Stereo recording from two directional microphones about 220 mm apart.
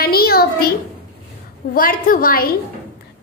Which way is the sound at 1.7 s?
40° left (ahead or behind).